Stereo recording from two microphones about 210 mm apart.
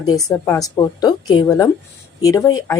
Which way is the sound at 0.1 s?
15° left (ahead or behind).